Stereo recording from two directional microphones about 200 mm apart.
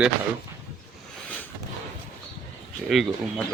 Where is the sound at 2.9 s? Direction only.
Centre (ahead or behind).